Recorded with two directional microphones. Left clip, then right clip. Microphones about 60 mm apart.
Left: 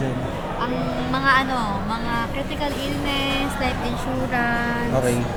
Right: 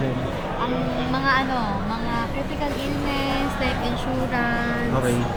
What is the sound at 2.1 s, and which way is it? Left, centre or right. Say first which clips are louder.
Vehicle: left 1 dB; centre.